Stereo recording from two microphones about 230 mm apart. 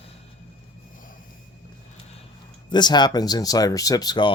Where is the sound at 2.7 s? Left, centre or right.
Centre.